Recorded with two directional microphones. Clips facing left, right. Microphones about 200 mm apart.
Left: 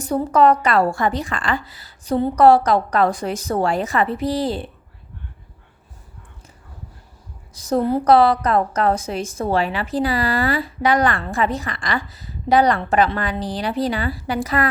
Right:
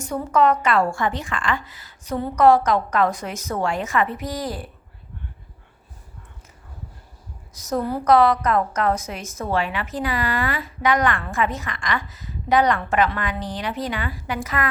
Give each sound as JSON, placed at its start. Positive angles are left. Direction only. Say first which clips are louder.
{"t": 0.0, "sound": "a woman's voice", "louder": "left 4 dB", "side_deg": 35}
{"t": 7.5, "sound": "a woman's voice", "louder": "left 5 dB", "side_deg": 30}